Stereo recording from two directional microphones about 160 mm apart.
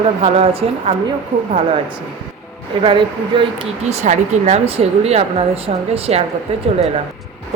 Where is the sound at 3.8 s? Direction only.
45° right (ahead or behind).